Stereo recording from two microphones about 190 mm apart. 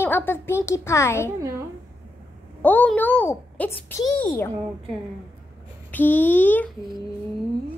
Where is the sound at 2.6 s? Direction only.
10° left (ahead or behind).